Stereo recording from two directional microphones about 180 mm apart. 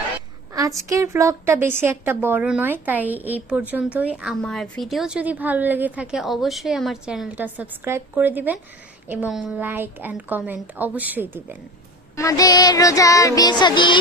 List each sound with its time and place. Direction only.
0.5 s a woman's voice: 20° right (ahead or behind)
12.1 s music: 20° left (ahead or behind)